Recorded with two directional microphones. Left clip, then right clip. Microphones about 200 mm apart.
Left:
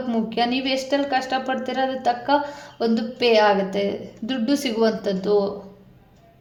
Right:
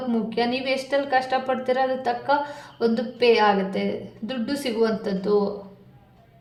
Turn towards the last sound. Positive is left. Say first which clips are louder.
# left 2 dB
turn(degrees=35)  # may be behind; listen again after turning